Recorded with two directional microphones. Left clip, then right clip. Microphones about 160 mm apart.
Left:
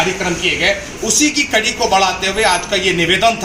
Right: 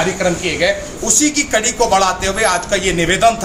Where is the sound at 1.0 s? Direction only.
20° right (ahead or behind).